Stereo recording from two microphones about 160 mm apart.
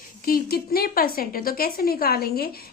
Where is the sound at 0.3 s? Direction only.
70° left (ahead or behind).